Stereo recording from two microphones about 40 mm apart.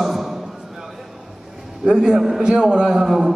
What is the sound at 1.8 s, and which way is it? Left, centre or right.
A man's voice, centre.